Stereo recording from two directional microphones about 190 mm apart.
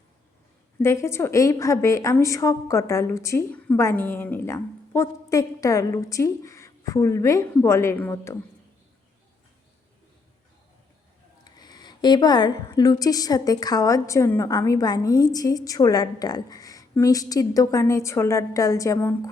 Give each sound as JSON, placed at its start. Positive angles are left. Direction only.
{"t": 0.8, "sound": "a woman's voice", "side_deg": 15}
{"t": 11.4, "sound": "a woman's voice", "side_deg": 20}